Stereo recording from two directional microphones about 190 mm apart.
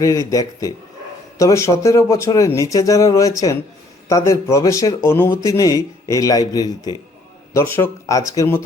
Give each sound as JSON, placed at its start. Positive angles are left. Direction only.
{"t": 0.0, "sound": "a man's voice", "side_deg": 15}